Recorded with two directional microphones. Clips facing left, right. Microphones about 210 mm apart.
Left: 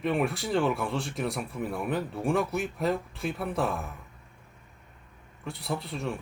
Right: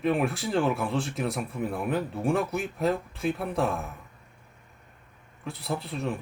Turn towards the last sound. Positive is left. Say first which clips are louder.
# right 1 dB
turn(degrees=0)  # may be behind; listen again after turning